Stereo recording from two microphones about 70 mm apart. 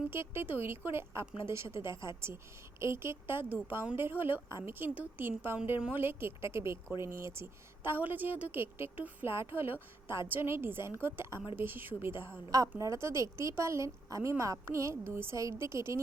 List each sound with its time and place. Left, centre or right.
0.1 s a woman's voice: right
7.9 s a woman's voice: right
12.5 s a woman's voice: right
12.8 s a woman's voice: right